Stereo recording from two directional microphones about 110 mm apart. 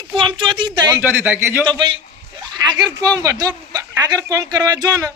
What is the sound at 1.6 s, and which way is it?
Speech, 50° right (ahead or behind).